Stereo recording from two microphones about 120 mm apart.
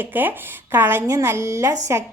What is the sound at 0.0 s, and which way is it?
A woman's voice, 15° right (ahead or behind).